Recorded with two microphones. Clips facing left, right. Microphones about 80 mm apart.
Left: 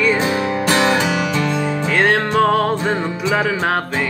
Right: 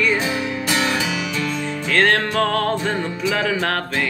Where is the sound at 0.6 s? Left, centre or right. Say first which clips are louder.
Left 7 dB; left.